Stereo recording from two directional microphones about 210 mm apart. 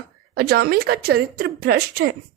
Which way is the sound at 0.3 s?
50° right (ahead or behind).